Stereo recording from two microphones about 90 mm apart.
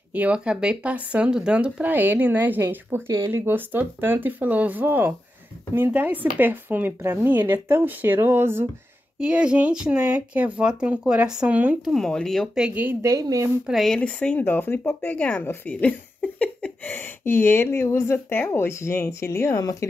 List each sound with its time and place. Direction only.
0.1 s speech: 15° right (ahead or behind)
9.2 s speech: 10° right (ahead or behind)
11.8 s speech: centre (ahead or behind)
12.5 s speech: 10° right (ahead or behind)
13.0 s speech: 40° right (ahead or behind)
13.7 s speech: centre (ahead or behind); by 15.1 s 25° left (ahead or behind)
15.1 s speech: 15° left (ahead or behind); by 19.9 s 40° left (ahead or behind)